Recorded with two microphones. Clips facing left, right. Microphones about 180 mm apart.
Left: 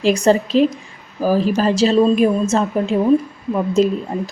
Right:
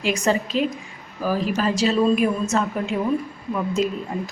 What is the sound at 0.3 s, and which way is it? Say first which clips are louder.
A woman's voice: left 7 dB; 35° left (ahead or behind).